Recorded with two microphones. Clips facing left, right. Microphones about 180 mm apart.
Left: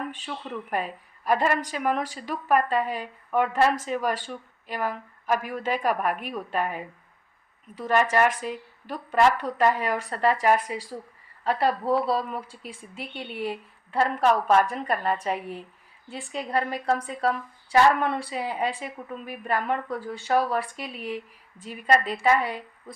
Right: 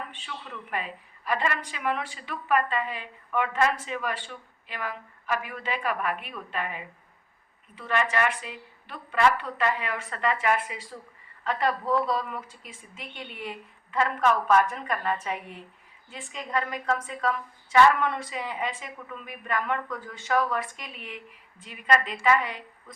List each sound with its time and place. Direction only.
0.1 s a woman's voice: 40° left (ahead or behind)